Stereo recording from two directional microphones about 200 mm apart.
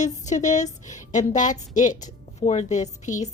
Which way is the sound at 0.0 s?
35° left (ahead or behind).